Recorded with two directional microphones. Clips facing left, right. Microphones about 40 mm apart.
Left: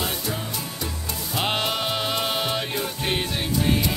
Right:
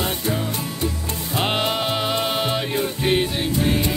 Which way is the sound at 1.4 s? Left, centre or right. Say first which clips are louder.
Right 3 dB; centre.